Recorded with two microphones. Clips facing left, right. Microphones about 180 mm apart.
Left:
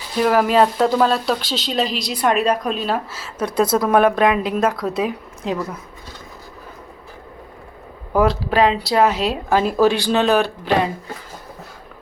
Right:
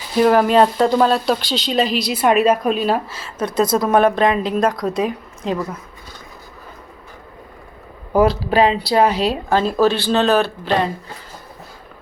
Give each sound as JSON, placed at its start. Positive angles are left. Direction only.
{"t": 0.2, "sound": "speech", "side_deg": 0}
{"t": 3.1, "sound": "a woman's voice", "side_deg": 5}
{"t": 8.1, "sound": "speech", "side_deg": 0}